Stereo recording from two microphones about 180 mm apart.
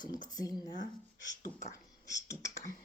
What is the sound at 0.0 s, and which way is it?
Speech, 25° left (ahead or behind).